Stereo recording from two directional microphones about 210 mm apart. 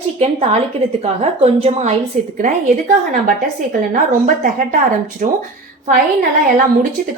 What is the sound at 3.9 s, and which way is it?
A woman's voice, 40° right (ahead or behind).